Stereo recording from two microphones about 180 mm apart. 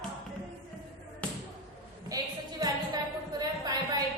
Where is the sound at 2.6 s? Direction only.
20° right (ahead or behind).